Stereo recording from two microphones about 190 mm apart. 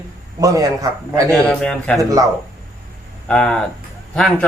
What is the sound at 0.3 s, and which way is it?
Speech, 15° right (ahead or behind).